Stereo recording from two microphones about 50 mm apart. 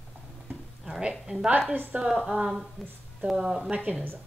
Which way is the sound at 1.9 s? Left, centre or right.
Right.